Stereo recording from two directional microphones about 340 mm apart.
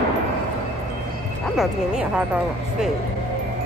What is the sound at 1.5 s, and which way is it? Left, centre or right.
Speech, centre.